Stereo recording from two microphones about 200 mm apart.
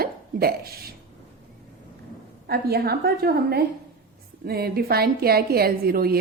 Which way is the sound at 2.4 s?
50° right (ahead or behind).